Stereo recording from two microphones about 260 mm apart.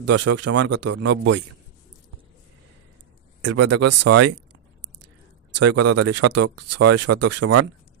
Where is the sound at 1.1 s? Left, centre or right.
Right.